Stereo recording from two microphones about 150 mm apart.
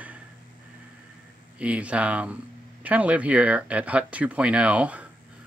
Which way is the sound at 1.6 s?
10° right (ahead or behind).